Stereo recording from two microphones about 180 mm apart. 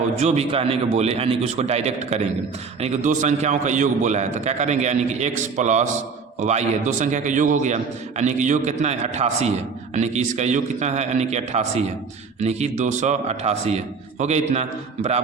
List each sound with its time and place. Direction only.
0.2 s a man's voice: 35° right (ahead or behind)